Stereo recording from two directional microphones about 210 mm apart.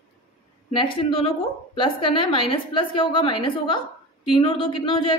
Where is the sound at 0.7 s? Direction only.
25° left (ahead or behind).